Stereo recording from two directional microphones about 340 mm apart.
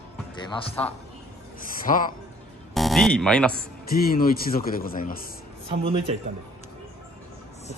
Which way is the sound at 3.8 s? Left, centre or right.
Left.